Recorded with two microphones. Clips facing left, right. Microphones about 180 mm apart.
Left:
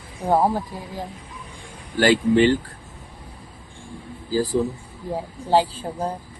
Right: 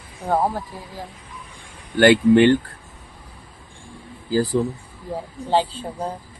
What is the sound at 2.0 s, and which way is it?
Speech, 60° right (ahead or behind).